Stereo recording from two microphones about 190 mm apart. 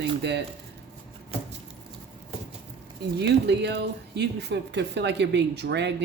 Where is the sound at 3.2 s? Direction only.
60° right (ahead or behind).